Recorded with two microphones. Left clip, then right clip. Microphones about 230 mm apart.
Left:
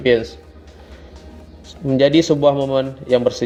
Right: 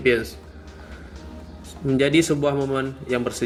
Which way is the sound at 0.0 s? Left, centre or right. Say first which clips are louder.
Left 5 dB; centre.